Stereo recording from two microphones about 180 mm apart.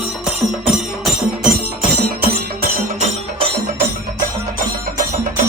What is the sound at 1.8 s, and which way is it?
Music, 60° right (ahead or behind).